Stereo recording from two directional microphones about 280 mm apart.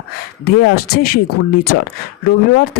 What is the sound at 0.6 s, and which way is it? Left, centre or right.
Speech, left.